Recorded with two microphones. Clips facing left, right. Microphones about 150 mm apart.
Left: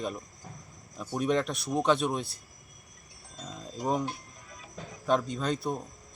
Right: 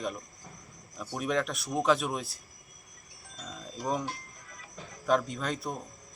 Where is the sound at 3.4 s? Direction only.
25° left (ahead or behind).